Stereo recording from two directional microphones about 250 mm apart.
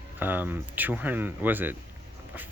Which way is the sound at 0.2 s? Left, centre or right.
Centre.